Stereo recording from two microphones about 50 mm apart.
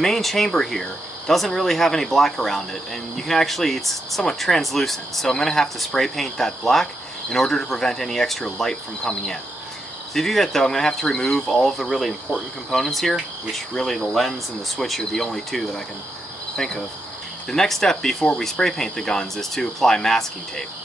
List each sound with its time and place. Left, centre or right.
0.0 s speech: centre